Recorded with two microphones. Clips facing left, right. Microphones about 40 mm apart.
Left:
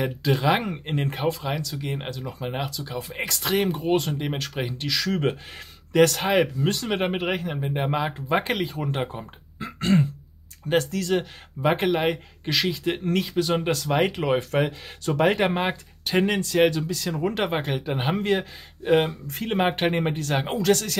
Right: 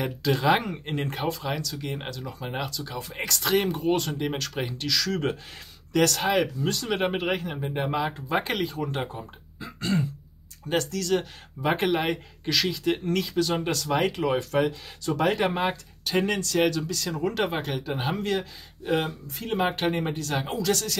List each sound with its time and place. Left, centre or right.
0.0 s speech: centre; by 6.9 s left
6.9 s speech: centre
9.6 s throat clearing: left
10.7 s speech: left
11.6 s speech: centre
12.4 s speech: centre; by 20.9 s left